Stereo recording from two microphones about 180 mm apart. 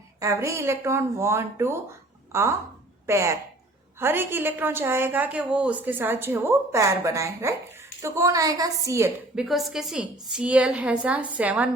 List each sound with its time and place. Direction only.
0.2 s a woman's voice: 15° right (ahead or behind)